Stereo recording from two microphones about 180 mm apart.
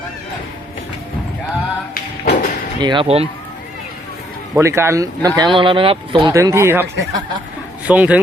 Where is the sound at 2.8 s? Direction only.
30° right (ahead or behind).